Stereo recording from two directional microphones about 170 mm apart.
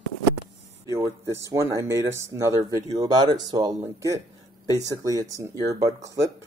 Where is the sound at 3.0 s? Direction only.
25° right (ahead or behind).